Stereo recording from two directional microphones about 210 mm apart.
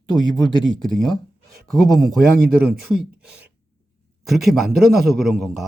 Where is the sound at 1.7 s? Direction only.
Centre (ahead or behind).